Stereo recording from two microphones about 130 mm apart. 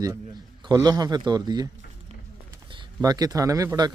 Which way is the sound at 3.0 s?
30° right (ahead or behind).